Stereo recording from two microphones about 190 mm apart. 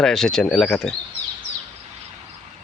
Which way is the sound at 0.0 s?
Centre (ahead or behind).